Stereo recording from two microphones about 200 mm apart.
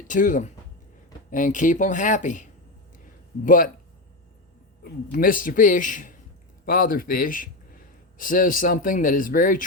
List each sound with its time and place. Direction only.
0.1 s a man's voice: 40° left (ahead or behind)
4.8 s a man's voice: 45° left (ahead or behind)